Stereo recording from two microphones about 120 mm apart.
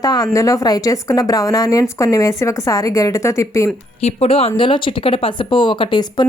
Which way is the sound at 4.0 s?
55° left (ahead or behind).